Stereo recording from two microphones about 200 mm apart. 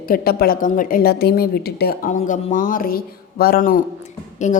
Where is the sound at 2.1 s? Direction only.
40° left (ahead or behind).